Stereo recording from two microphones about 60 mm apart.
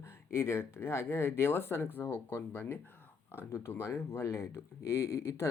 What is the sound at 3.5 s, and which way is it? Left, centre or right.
Speech, left.